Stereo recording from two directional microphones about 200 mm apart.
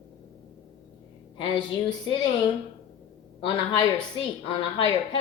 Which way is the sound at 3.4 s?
25° left (ahead or behind).